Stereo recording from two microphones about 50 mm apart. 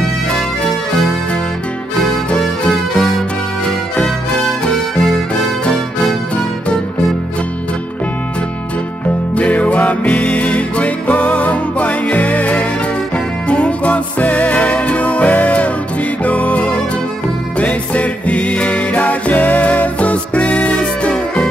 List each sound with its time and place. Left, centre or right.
3.6 s music: centre
9.3 s music: left